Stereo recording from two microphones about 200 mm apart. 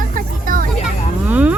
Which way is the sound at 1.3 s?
5° right (ahead or behind).